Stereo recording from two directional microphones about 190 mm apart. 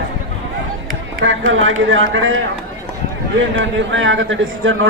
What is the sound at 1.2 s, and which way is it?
Speech, 90° right.